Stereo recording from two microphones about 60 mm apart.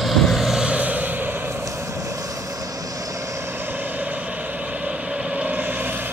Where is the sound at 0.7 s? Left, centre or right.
Right.